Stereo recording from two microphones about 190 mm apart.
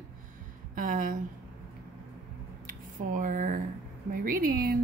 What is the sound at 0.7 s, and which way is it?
Speech, 45° right (ahead or behind).